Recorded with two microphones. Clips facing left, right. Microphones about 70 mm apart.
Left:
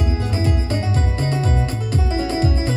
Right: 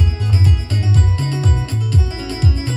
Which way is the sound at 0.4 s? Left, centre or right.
Left.